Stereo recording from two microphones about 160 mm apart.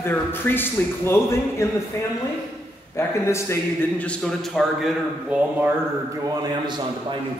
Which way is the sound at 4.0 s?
5° left (ahead or behind).